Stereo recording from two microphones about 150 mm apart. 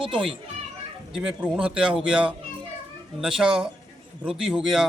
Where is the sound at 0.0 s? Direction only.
35° right (ahead or behind).